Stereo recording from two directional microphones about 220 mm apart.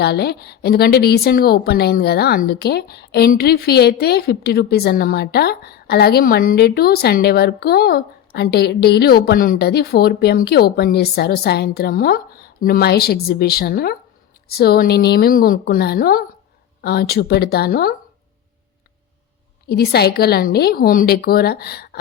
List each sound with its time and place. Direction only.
0.0 s a woman's voice: 45° left (ahead or behind)
19.6 s a woman's voice: 45° left (ahead or behind)